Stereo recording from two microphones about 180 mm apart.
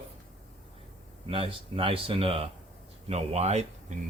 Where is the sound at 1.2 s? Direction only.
30° right (ahead or behind).